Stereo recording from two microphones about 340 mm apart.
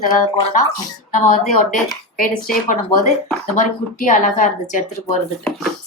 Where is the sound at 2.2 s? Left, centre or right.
Left.